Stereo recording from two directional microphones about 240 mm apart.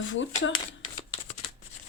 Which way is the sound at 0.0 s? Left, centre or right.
Left.